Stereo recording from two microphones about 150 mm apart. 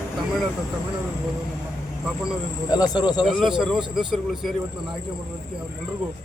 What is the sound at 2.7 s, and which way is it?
Speech, 25° left (ahead or behind).